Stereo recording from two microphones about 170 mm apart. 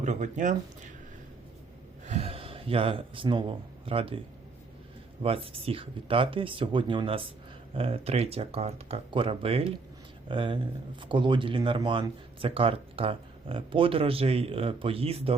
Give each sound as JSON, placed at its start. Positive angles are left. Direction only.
{"t": 0.0, "sound": "speech", "side_deg": -45}
{"t": 2.0, "sound": "gasp", "side_deg": -35}
{"t": 3.8, "sound": "speech", "side_deg": -30}
{"t": 5.2, "sound": "speech", "side_deg": -35}